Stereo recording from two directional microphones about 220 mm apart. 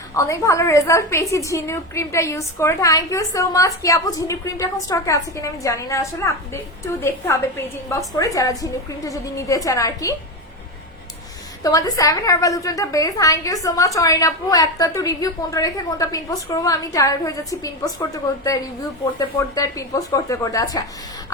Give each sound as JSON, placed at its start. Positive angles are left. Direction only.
{"t": 0.1, "sound": "a woman's voice", "side_deg": 15}
{"t": 11.6, "sound": "a woman's voice", "side_deg": 15}